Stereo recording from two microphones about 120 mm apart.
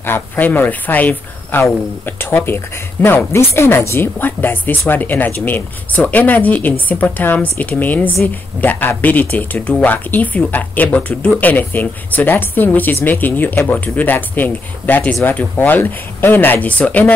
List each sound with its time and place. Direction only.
0.0 s speech: 15° left (ahead or behind)